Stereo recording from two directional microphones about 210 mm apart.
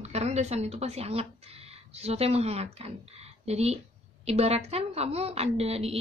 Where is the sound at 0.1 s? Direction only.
30° right (ahead or behind).